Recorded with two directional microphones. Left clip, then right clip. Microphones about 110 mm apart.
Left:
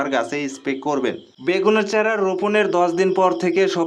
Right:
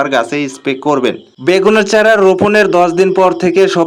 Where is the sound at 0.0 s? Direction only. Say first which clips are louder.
Right 8 dB; 40° right (ahead or behind).